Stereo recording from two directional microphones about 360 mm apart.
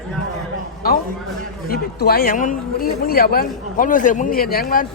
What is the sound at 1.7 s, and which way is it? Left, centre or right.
Speech, left.